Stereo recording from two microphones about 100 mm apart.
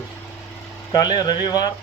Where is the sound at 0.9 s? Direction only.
45° left (ahead or behind).